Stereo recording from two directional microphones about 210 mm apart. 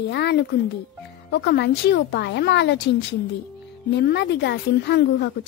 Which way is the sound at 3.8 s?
55° left (ahead or behind).